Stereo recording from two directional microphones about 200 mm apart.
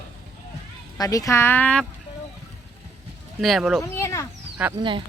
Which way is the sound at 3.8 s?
15° left (ahead or behind).